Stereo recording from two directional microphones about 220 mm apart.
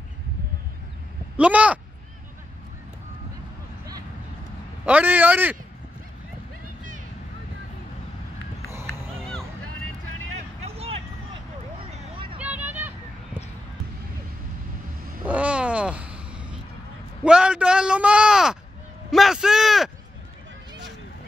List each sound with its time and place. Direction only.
1.3 s a man's voice: 5° right (ahead or behind)
4.8 s a man's voice: 5° right (ahead or behind)
8.7 s a sound: 10° right (ahead or behind)
9.2 s music: 5° left (ahead or behind)
10.6 s vehicle: 30° right (ahead or behind)
12.4 s vehicle: 5° right (ahead or behind)
15.2 s a sound: 5° right (ahead or behind)
17.2 s a man's voice: 5° right (ahead or behind)